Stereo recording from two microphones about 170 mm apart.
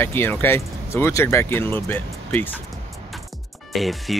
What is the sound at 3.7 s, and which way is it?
Speech, centre (ahead or behind).